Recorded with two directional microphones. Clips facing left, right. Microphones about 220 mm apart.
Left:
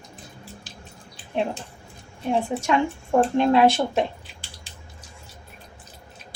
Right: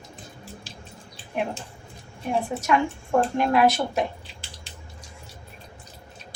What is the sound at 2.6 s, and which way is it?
A woman's voice, 25° left (ahead or behind).